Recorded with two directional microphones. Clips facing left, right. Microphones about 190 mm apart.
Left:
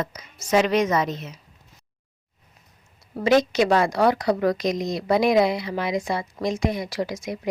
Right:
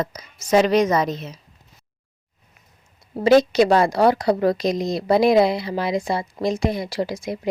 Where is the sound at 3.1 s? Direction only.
35° right (ahead or behind).